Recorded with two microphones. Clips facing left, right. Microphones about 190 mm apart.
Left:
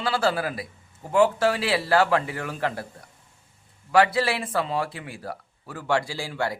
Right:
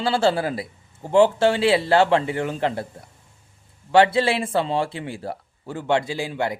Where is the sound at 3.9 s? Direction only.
25° right (ahead or behind).